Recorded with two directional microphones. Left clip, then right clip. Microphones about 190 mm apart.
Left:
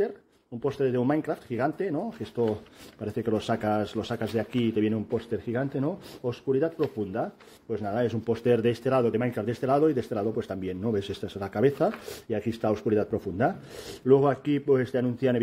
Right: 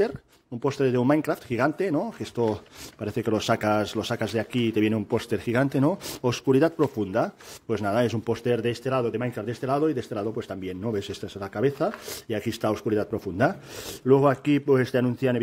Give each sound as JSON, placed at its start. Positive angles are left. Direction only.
{"t": 0.7, "sound": "speech", "side_deg": -25}
{"t": 8.3, "sound": "speech", "side_deg": -5}
{"t": 12.3, "sound": "speech", "side_deg": -20}